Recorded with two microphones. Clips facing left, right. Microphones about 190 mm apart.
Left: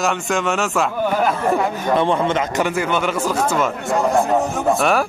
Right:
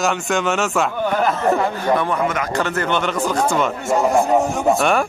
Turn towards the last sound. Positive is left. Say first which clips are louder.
# even
turn(degrees=0)  # may be behind; listen again after turning